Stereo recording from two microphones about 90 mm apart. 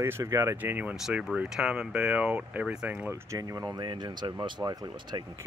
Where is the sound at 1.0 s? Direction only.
5° right (ahead or behind).